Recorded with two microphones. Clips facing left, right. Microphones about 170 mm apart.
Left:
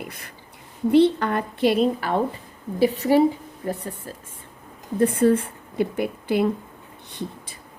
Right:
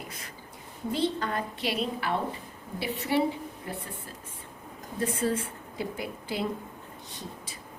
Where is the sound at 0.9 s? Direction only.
65° left (ahead or behind).